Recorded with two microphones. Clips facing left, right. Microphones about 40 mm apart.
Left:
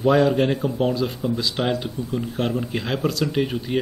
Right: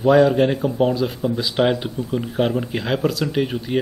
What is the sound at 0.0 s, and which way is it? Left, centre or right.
Speech, centre.